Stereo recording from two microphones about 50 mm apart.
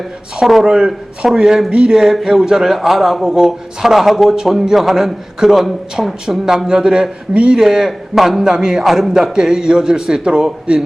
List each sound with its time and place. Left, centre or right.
0.3 s a man's voice: centre
1.7 s speech: centre
2.0 s a man's voice: centre
6.7 s a man's voice: centre